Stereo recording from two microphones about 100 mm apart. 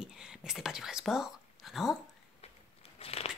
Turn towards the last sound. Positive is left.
turn(degrees=80)